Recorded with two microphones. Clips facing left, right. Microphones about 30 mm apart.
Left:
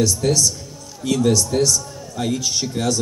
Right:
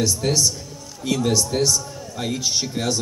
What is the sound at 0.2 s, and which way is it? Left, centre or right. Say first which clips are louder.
A man's voice: left 2 dB; centre.